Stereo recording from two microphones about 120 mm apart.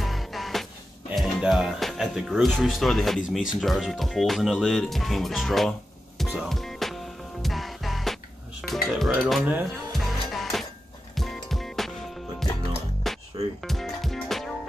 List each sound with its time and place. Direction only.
0.0 s music: centre (ahead or behind)
1.1 s speech: centre (ahead or behind)
9.9 s music: centre (ahead or behind)
13.0 s music: centre (ahead or behind)